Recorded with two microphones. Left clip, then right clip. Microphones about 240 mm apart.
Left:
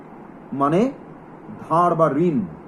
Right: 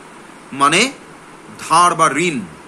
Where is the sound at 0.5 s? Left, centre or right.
Right.